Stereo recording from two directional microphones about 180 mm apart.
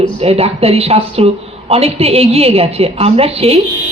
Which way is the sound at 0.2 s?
35° right (ahead or behind).